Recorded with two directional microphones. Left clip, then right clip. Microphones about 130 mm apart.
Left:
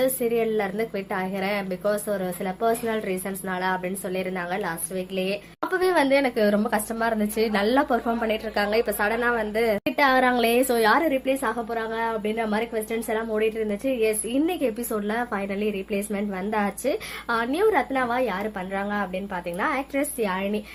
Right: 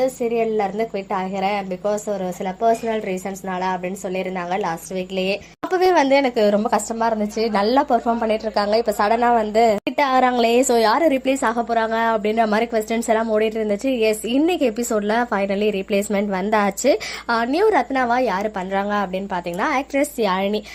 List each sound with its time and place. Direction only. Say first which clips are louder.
0.0 s a woman's voice: right 3 dB; 5° right (ahead or behind)
7.1 s a woman's voice: right 1 dB; 5° right (ahead or behind); by 11.2 s 25° right (ahead or behind)
11.3 s a woman's voice: right 6 dB; 40° right (ahead or behind)
17.2 s a woman's voice: right 4 dB; 30° right (ahead or behind)